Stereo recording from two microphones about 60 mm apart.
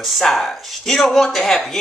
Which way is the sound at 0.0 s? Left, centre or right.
Centre.